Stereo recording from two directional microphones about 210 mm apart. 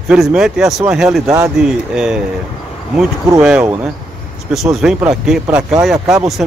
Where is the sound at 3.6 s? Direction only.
10° right (ahead or behind).